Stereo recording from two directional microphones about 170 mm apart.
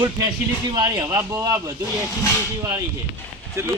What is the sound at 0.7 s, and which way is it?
Speech, 25° right (ahead or behind).